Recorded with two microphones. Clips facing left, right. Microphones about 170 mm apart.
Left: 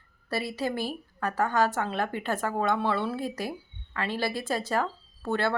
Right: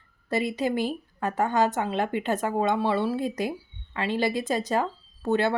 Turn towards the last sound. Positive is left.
turn(degrees=-20)  # may be behind; listen again after turning